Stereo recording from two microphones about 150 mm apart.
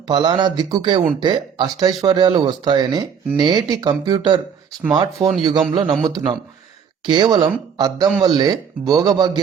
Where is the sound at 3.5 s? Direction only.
25° right (ahead or behind).